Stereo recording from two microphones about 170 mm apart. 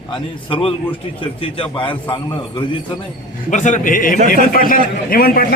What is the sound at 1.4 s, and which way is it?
Speech, 30° left (ahead or behind).